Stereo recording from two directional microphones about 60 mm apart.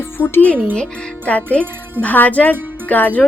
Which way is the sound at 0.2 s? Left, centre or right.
Left.